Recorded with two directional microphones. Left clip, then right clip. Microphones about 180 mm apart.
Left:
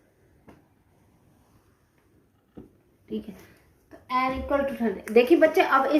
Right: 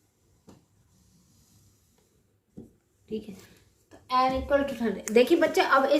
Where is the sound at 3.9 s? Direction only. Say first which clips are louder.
Right 1 dB; 30° left (ahead or behind).